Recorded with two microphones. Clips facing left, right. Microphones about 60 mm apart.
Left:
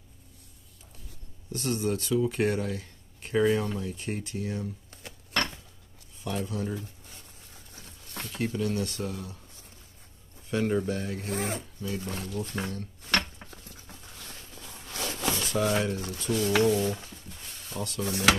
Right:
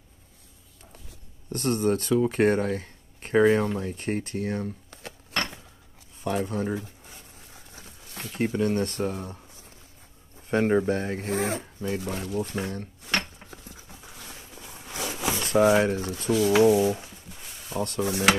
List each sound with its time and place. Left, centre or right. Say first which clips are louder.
1.5 s speech: right 5 dB; right
6.2 s a sound: right 5 dB; right; by 8.4 s centre
8.6 s speech: right 5 dB; right
10.5 s speech: right 5 dB; right
12.0 s speech: right 4 dB; centre
13.0 s a sound: left 1 dB; centre
15.5 s speech: right 9 dB; right
16.3 s a sound: right 5 dB; centre
18.0 s speech: right 1 dB; right